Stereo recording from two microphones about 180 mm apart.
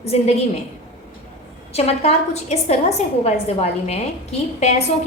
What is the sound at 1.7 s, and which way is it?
A woman's voice, 35° left (ahead or behind).